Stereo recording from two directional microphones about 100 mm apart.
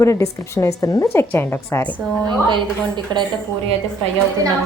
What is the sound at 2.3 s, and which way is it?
Speech, 50° right (ahead or behind).